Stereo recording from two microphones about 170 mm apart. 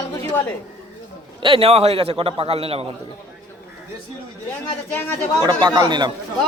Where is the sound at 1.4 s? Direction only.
35° right (ahead or behind).